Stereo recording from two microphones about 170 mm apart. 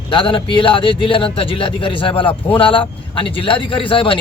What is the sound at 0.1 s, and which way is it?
A man's voice, 30° left (ahead or behind).